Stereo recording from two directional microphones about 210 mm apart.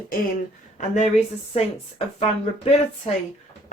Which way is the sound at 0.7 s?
35° left (ahead or behind).